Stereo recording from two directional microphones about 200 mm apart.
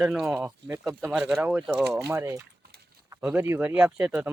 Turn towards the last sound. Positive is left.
turn(degrees=-10)  # may be behind; listen again after turning